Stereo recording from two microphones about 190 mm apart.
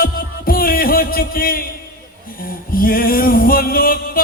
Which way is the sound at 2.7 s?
50° left (ahead or behind).